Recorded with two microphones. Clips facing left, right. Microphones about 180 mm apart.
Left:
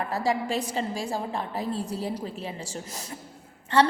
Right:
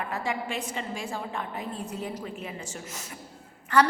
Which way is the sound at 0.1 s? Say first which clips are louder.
Left 5 dB; 35° left (ahead or behind).